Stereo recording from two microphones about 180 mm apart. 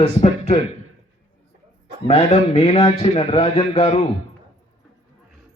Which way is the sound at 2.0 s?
35° left (ahead or behind).